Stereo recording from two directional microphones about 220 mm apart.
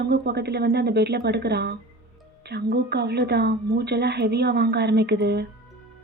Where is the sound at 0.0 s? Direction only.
50° right (ahead or behind).